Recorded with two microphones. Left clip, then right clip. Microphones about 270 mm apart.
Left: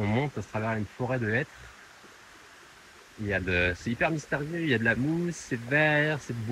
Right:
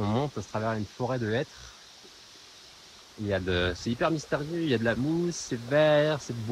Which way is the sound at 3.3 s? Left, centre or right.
Right.